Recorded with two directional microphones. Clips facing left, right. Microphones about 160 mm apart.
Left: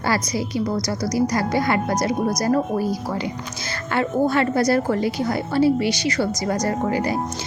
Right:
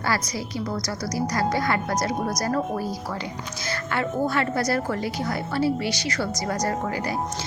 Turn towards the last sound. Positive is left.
turn(degrees=25)  # may be behind; listen again after turning